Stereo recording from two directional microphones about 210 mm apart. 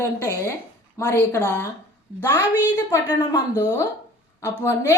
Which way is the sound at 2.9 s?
20° left (ahead or behind).